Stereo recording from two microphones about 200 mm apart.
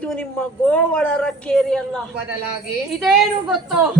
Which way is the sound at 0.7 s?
5° left (ahead or behind).